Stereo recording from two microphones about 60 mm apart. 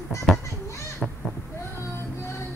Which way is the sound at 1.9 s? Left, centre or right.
Left.